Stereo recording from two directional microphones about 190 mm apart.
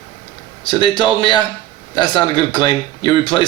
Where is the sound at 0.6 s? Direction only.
25° left (ahead or behind).